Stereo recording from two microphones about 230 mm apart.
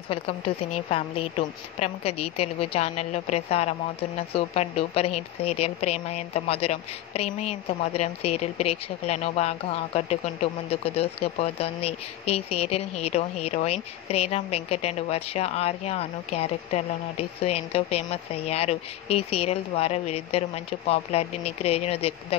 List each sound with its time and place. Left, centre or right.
0.7 s a woman's voice: left